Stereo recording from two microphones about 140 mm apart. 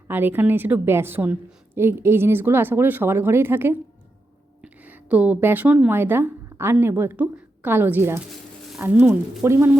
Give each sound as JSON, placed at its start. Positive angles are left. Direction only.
{"t": 0.1, "sound": "a woman's voice", "side_deg": -15}